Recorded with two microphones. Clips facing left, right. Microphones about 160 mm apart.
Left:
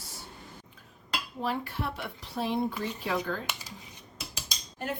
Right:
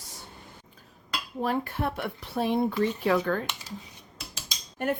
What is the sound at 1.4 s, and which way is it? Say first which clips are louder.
Speech: right 5 dB; 50° right (ahead or behind).